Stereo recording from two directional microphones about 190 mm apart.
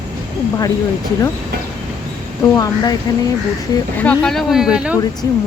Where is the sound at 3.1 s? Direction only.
20° left (ahead or behind).